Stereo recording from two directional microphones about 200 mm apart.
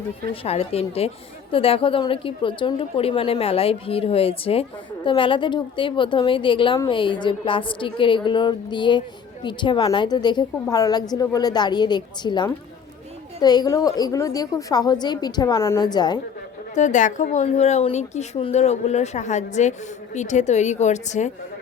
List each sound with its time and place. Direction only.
0.4 s a woman's voice: 30° left (ahead or behind)
16.7 s speech: 40° left (ahead or behind)